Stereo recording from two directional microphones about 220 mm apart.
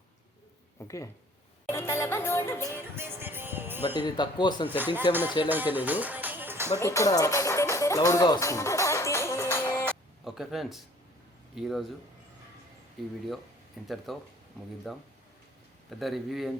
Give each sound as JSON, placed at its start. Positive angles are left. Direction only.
{"t": 0.8, "sound": "music", "side_deg": 15}
{"t": 2.9, "sound": "music", "side_deg": -10}
{"t": 3.8, "sound": "speech", "side_deg": 20}
{"t": 5.5, "sound": "music", "side_deg": -10}
{"t": 6.7, "sound": "speech", "side_deg": 15}
{"t": 9.6, "sound": "music", "side_deg": 10}
{"t": 10.2, "sound": "a man's voice", "side_deg": 0}
{"t": 13.0, "sound": "a man's voice", "side_deg": 0}